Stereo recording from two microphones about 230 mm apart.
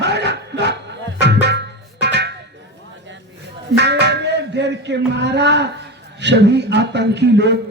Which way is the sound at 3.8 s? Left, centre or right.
Right.